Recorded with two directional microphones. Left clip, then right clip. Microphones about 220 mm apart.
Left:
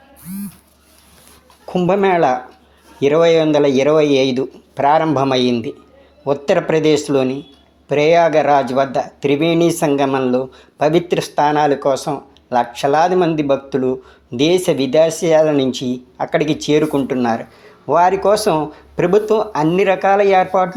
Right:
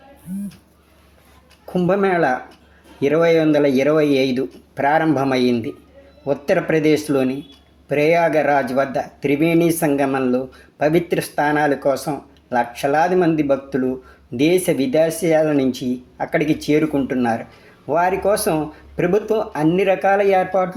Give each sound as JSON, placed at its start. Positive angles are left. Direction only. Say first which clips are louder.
{"t": 1.6, "sound": "speech", "louder": "left 3 dB", "side_deg": 10}